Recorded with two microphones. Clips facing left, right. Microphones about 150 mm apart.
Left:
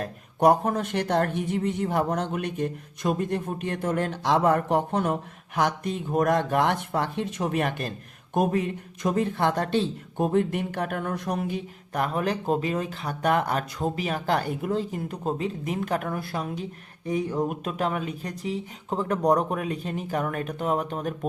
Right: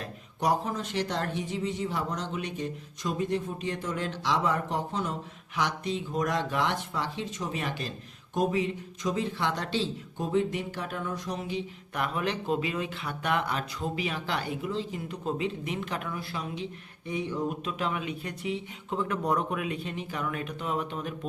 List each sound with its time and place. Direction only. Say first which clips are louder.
0.0 s speech: left 9 dB; 55° left (ahead or behind)